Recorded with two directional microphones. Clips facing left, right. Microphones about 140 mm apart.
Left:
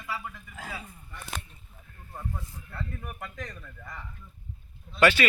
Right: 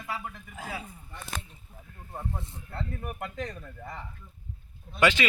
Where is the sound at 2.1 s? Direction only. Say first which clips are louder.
Right 2 dB; 25° right (ahead or behind).